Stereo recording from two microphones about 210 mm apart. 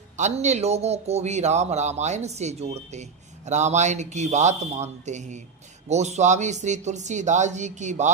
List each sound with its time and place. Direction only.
0.2 s a man's voice: 35° right (ahead or behind)